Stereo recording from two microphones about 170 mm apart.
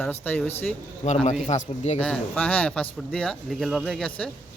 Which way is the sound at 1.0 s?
45° left (ahead or behind).